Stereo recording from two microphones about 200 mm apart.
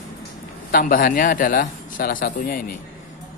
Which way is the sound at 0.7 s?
45° left (ahead or behind).